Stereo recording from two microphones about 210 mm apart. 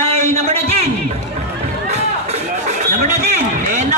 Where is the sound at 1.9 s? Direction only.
30° right (ahead or behind).